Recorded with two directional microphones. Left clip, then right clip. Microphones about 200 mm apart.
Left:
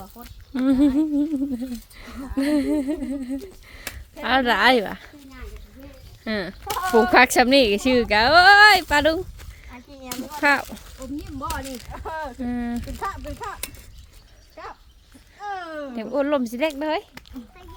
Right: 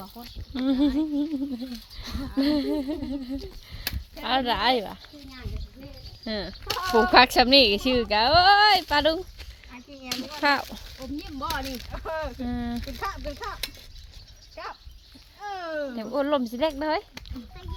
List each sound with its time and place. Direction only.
0.5 s speech: 20° left (ahead or behind)
0.9 s speech: 10° left (ahead or behind); by 5.0 s 35° left (ahead or behind)
6.2 s speech: 25° left (ahead or behind)
6.5 s speech: centre (ahead or behind)
6.9 s speech: 20° left (ahead or behind)
10.1 s a sound: 10° left (ahead or behind)
10.4 s speech: 20° left (ahead or behind)
10.9 s speech: 10° right (ahead or behind)
11.9 s speech: 20° left (ahead or behind)
15.4 s speech: 5° left (ahead or behind)
16.1 s speech: 15° left (ahead or behind)